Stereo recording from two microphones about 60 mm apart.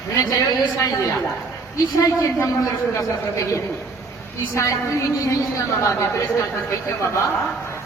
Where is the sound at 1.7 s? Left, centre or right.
Left.